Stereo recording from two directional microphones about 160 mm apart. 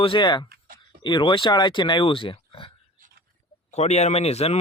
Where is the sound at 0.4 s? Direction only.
70° right (ahead or behind).